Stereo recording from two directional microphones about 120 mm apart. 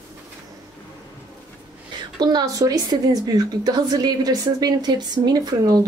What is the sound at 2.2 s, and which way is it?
A woman's voice, 35° right (ahead or behind).